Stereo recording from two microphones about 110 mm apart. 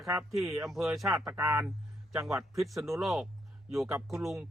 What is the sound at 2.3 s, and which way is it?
Speech, centre (ahead or behind).